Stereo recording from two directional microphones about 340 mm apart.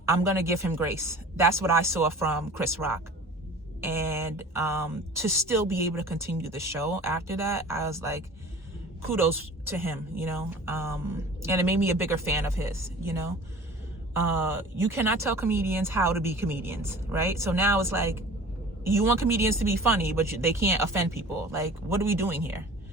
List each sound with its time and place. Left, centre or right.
0.0 s speech: centre
9.6 s speech: centre
14.3 s speech: centre